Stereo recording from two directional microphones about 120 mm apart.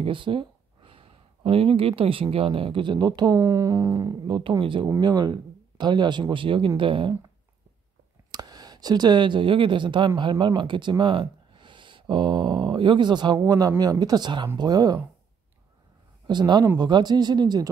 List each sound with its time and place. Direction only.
0.0 s a sound: 45° right (ahead or behind)
2.3 s speech: 50° right (ahead or behind); by 4.3 s 30° right (ahead or behind)
4.3 s speech: 45° right (ahead or behind)
8.3 s speech: 35° right (ahead or behind)
16.3 s speech: 35° right (ahead or behind)